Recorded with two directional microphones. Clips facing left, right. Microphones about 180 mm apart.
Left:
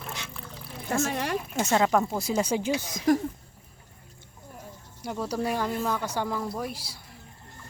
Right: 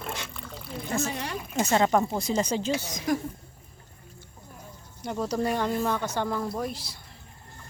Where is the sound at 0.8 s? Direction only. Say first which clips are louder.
Left 2 dB; 50° left (ahead or behind).